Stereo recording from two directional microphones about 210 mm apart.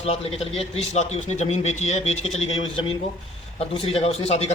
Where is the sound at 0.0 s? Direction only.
30° left (ahead or behind).